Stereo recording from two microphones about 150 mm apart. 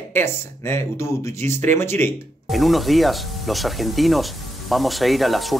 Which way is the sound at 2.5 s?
Centre (ahead or behind).